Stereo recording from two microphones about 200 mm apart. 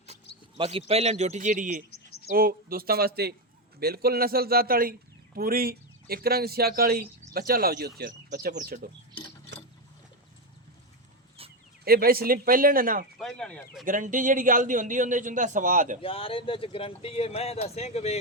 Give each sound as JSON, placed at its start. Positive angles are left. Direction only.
{"t": 0.5, "sound": "a man's voice", "side_deg": -30}
{"t": 1.9, "sound": "a sound", "side_deg": 55}
{"t": 2.3, "sound": "a man's voice", "side_deg": -45}
{"t": 11.9, "sound": "a man's voice", "side_deg": -50}
{"t": 13.1, "sound": "speech", "side_deg": 0}
{"t": 13.8, "sound": "a man's voice", "side_deg": -40}
{"t": 16.0, "sound": "speech", "side_deg": 25}